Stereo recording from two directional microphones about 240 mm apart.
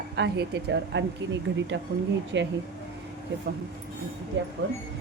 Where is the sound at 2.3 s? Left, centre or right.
Right.